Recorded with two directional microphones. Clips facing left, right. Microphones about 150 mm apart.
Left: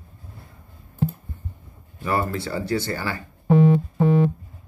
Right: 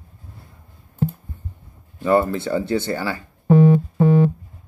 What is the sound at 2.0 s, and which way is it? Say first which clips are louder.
Speech: right 7 dB; 20° right (ahead or behind).